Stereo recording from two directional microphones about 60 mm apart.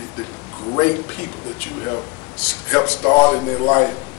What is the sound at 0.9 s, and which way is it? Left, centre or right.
Speech, left.